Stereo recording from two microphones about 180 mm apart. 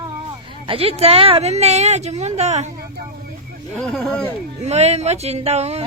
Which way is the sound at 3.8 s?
Centre (ahead or behind).